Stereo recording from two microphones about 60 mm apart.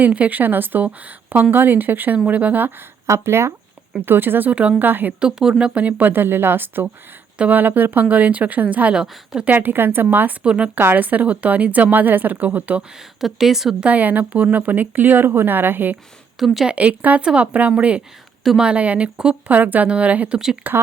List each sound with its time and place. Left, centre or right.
0.0 s a woman's voice: right
3.1 s speech: right
4.0 s a woman's voice: right
5.2 s a woman's voice: centre; by 6.8 s right
7.3 s a woman's voice: right
9.0 s speech: centre
9.5 s a woman's voice: right
10.4 s speech: centre
10.8 s a woman's voice: right
13.0 s a woman's voice: centre
13.8 s a woman's voice: right
19.5 s a woman's voice: right